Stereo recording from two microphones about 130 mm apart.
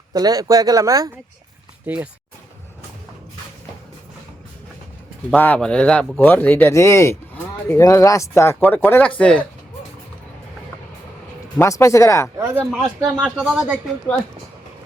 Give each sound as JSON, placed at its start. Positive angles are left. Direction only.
{"t": 0.1, "sound": "speech", "side_deg": -30}
{"t": 5.3, "sound": "speech", "side_deg": 15}
{"t": 11.6, "sound": "speech", "side_deg": 25}
{"t": 12.4, "sound": "speech", "side_deg": -15}
{"t": 13.2, "sound": "speech", "side_deg": -5}